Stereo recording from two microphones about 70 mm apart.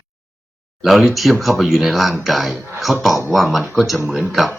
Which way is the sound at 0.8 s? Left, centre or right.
Centre.